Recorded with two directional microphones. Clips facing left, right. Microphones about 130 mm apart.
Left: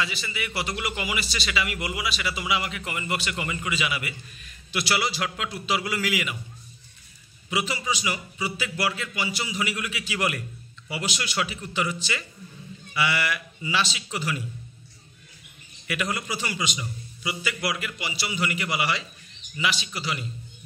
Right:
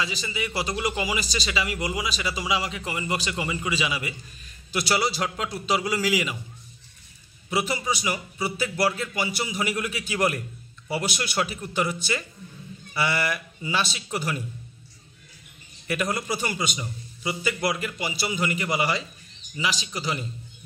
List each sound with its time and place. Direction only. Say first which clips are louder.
0.0 s a man's voice: right 1 dB; 25° right (ahead or behind)
0.6 s a man's voice: right 3 dB; 35° right (ahead or behind)
4.6 s a man's voice: right 2 dB; 35° right (ahead or behind)
5.8 s a man's voice: right 5 dB; 20° right (ahead or behind)
7.4 s a man's voice: right 2 dB; 35° right (ahead or behind)
15.9 s a man's voice: right 3 dB; 35° right (ahead or behind)